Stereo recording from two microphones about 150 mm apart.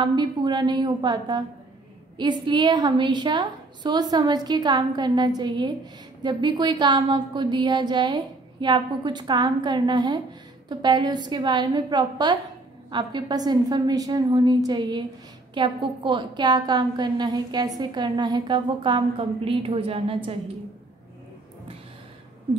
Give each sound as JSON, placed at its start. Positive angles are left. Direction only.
{"t": 0.0, "sound": "a woman's voice", "side_deg": -30}